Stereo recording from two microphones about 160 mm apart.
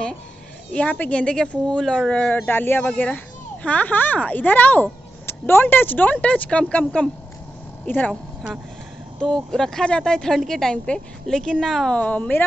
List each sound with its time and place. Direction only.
0.7 s speech: 10° left (ahead or behind)
9.2 s a woman's voice: 5° left (ahead or behind)